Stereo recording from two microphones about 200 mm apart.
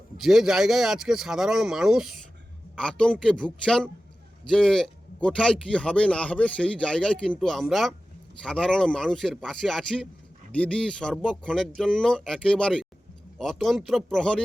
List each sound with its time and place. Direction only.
0.2 s speech: centre (ahead or behind)